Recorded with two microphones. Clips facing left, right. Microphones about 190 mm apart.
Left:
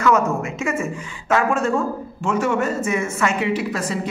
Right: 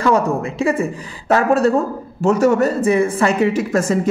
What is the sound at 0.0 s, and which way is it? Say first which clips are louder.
Speech: right 2 dB; 30° right (ahead or behind).